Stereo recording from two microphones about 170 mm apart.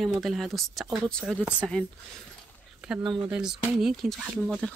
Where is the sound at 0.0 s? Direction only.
Centre (ahead or behind).